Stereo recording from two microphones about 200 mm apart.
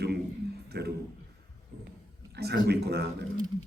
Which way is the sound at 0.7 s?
55° right (ahead or behind).